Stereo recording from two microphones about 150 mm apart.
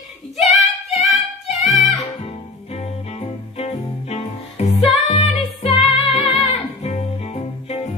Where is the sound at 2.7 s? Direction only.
40° left (ahead or behind).